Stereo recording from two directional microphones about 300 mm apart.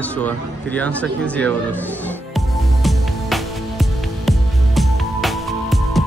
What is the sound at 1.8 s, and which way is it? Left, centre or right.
Music, centre.